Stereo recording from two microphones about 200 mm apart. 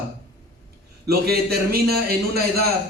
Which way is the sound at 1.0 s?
50° right (ahead or behind).